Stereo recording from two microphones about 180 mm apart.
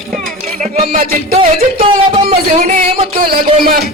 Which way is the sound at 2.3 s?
35° right (ahead or behind).